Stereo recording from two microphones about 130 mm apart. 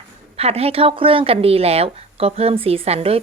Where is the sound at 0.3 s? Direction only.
50° right (ahead or behind).